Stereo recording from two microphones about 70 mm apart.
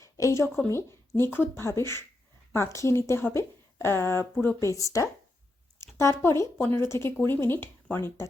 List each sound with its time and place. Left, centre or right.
0.0 s a woman's voice: left
4.6 s a woman's voice: left